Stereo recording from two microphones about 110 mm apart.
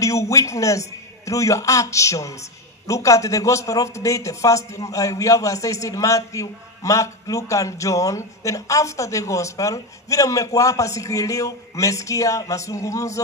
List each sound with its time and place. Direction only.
0.0 s a man's voice: 30° left (ahead or behind)